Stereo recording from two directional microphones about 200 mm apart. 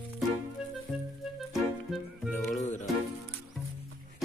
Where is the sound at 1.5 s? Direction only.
Centre (ahead or behind).